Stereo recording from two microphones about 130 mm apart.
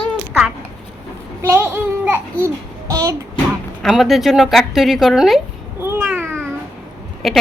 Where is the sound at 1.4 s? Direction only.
20° right (ahead or behind).